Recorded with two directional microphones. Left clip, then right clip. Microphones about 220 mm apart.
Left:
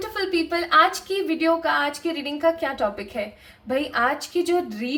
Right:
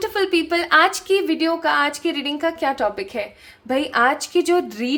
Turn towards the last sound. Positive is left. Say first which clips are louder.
# right 4 dB
turn(degrees=-50)  # may be behind; listen again after turning